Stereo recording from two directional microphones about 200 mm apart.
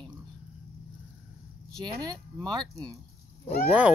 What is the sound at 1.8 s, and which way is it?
Speech, 20° right (ahead or behind).